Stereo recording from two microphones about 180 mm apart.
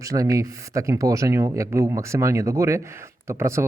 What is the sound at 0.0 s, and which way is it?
Speech, 20° right (ahead or behind).